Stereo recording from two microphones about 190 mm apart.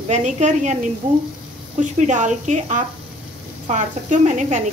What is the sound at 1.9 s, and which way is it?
Speech, 40° right (ahead or behind).